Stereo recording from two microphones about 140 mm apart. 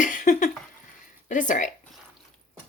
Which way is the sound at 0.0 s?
70° left (ahead or behind).